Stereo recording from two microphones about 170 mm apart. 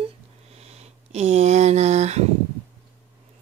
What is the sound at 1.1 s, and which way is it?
Speech, 40° right (ahead or behind).